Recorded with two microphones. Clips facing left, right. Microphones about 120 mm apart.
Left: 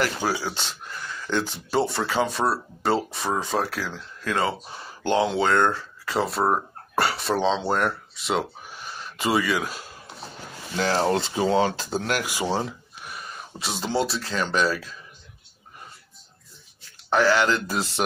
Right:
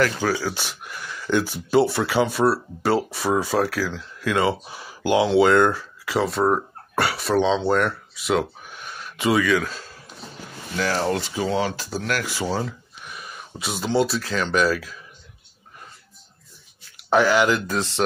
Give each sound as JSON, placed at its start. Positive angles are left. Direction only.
{"t": 0.3, "sound": "speech", "side_deg": 5}
{"t": 0.6, "sound": "speech", "side_deg": -10}
{"t": 8.2, "sound": "a sound", "side_deg": 0}
{"t": 10.8, "sound": "speech", "side_deg": 30}
{"t": 12.1, "sound": "speech", "side_deg": 15}
{"t": 13.0, "sound": "speech", "side_deg": 0}
{"t": 17.1, "sound": "speech", "side_deg": -15}